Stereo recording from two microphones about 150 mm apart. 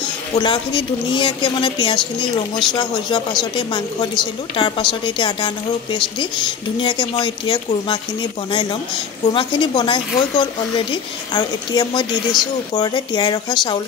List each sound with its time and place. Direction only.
0.4 s a woman's voice: 35° left (ahead or behind)